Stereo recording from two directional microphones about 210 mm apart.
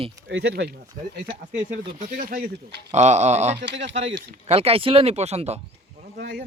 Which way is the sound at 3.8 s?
60° right (ahead or behind).